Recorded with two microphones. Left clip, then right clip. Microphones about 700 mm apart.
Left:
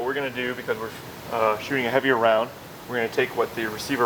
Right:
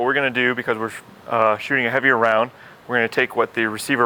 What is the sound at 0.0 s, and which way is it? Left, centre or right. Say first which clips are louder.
Speech: right 8 dB; right.